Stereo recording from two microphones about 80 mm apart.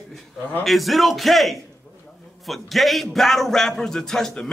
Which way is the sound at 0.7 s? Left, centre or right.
Centre.